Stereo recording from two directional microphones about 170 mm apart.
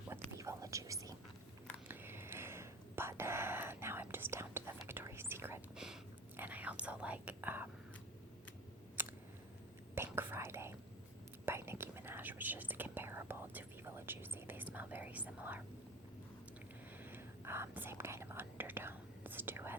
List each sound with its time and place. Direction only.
0.1 s whispering: 20° right (ahead or behind)
9.0 s a sound: 10° right (ahead or behind)
9.9 s whispering: 15° right (ahead or behind)
17.0 s whispering: 15° right (ahead or behind)